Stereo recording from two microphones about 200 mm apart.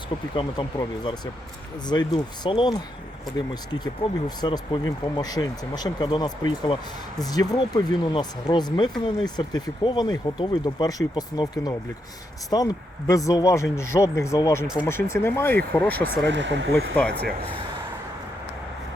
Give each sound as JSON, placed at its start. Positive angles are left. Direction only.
{"t": 0.3, "sound": "speech", "side_deg": 20}
{"t": 16.2, "sound": "speech", "side_deg": -60}